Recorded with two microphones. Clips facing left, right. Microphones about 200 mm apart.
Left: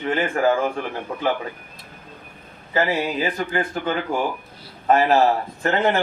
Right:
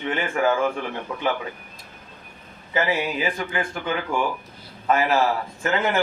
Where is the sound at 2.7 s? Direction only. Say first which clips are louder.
Left 2 dB; 35° left (ahead or behind).